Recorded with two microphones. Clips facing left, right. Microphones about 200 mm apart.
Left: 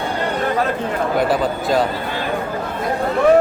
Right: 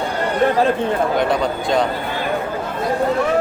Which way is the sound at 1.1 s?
5° left (ahead or behind).